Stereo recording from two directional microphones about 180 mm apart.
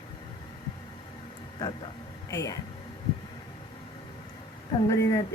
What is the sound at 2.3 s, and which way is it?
Speech, 15° left (ahead or behind).